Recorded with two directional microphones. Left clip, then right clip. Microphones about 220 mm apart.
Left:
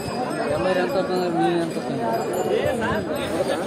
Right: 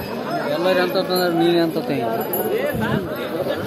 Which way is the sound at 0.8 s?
55° right (ahead or behind).